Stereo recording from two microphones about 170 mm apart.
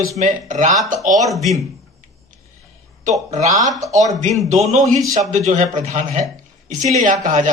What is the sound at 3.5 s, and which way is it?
Speech, 20° right (ahead or behind).